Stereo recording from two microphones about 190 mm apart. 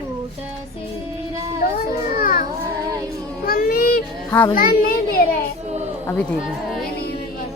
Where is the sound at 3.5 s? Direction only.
50° left (ahead or behind).